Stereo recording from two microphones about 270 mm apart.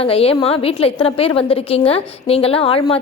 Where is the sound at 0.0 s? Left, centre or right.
Left.